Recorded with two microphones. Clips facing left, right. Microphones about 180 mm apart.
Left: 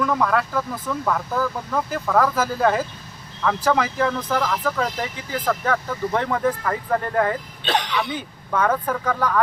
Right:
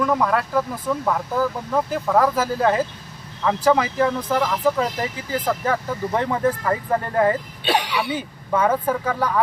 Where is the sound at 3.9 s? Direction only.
25° right (ahead or behind).